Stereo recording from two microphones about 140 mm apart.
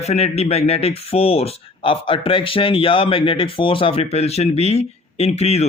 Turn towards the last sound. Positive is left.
turn(degrees=50)  # may be behind; listen again after turning